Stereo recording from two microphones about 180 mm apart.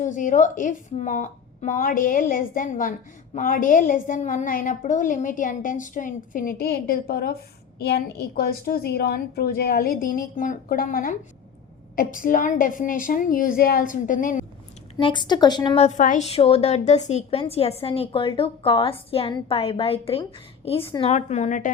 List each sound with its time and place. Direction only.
0.0 s a woman's voice: 45° left (ahead or behind)
14.9 s speech: 25° left (ahead or behind)
15.8 s a woman's voice: 45° left (ahead or behind)